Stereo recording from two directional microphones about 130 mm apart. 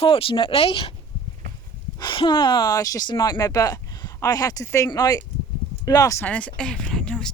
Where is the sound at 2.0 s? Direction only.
35° left (ahead or behind).